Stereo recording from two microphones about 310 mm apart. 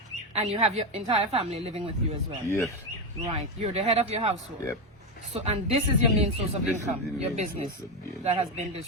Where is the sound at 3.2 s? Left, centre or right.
Centre.